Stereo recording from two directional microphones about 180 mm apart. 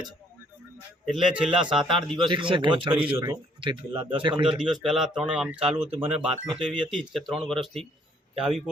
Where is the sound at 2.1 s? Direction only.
25° right (ahead or behind).